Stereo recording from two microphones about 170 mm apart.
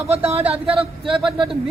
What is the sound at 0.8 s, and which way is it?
Speech, 5° right (ahead or behind).